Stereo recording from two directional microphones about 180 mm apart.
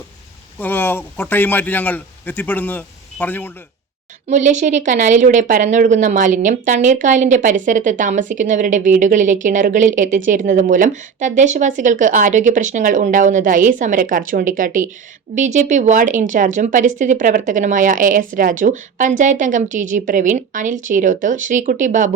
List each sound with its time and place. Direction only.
0.6 s a man's voice: 10° left (ahead or behind)
4.3 s a woman's voice: 40° right (ahead or behind)